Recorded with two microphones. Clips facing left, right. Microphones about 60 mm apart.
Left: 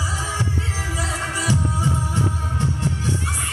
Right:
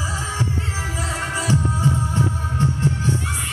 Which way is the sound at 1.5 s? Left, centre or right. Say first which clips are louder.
Right 2 dB; right.